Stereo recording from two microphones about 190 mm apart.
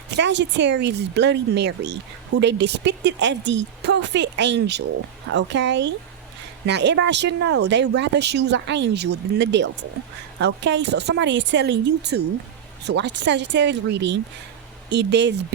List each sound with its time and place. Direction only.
0.2 s speech: 70° right (ahead or behind)